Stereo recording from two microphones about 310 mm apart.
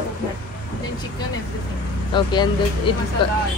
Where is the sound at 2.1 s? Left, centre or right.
Centre.